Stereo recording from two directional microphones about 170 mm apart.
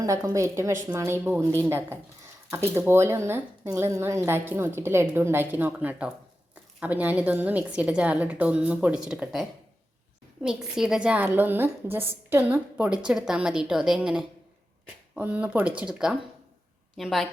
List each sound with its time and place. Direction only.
0.0 s a woman's voice: 20° right (ahead or behind); by 17.2 s centre (ahead or behind)